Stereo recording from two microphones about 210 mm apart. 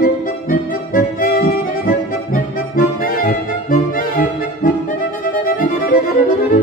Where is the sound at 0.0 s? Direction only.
40° left (ahead or behind).